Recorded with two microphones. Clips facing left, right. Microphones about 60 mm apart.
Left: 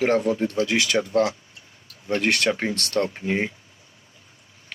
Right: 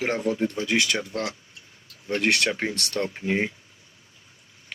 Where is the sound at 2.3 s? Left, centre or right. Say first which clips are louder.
Left 2 dB; left.